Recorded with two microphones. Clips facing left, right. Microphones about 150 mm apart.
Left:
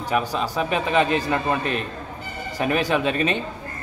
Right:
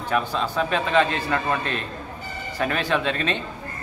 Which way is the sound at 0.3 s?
10° left (ahead or behind).